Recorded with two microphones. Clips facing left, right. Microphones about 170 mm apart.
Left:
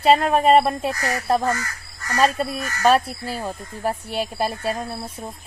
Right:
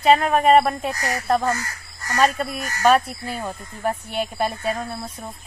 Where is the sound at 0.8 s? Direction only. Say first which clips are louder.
Left 1 dB; centre (ahead or behind).